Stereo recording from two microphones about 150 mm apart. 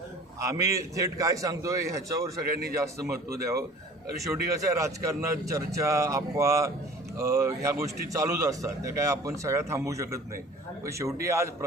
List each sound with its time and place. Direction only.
0.3 s a man's voice: 20° right (ahead or behind)
2.5 s a man's voice: 90° right
4.2 s a man's voice: 20° right (ahead or behind)